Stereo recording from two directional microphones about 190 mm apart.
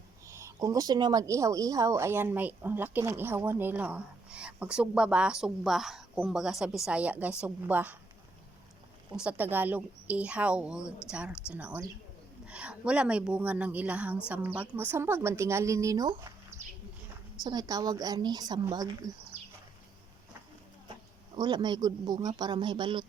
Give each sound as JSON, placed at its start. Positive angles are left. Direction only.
{"t": 0.3, "sound": "speech", "side_deg": -15}
{"t": 9.1, "sound": "speech", "side_deg": -10}
{"t": 16.6, "sound": "a sound", "side_deg": -40}
{"t": 17.4, "sound": "speech", "side_deg": -20}
{"t": 21.3, "sound": "speech", "side_deg": -20}